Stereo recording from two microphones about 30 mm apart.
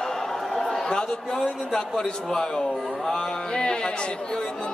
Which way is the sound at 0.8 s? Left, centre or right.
Left.